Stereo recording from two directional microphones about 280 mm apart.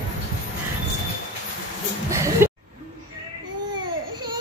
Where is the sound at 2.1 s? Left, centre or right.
Centre.